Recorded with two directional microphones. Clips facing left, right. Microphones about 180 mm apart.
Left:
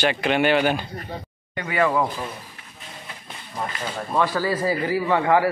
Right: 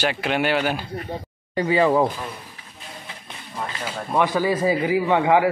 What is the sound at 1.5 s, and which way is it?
Speech, 30° right (ahead or behind).